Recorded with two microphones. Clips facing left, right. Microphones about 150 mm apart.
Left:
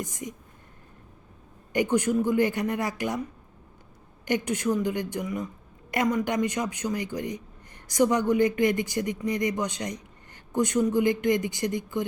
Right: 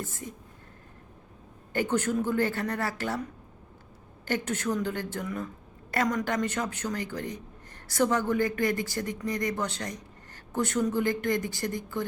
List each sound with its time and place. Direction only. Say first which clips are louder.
0.0 s speech: left 3 dB; 15° left (ahead or behind)
1.7 s speech: left 4 dB; 15° left (ahead or behind)
4.3 s speech: left 3 dB; 15° left (ahead or behind)